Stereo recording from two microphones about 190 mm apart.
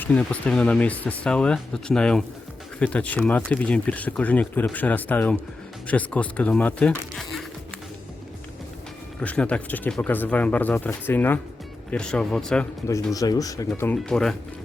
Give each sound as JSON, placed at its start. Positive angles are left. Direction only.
{"t": 0.0, "sound": "speech", "side_deg": 5}
{"t": 9.2, "sound": "speech", "side_deg": 5}
{"t": 13.1, "sound": "speech", "side_deg": 20}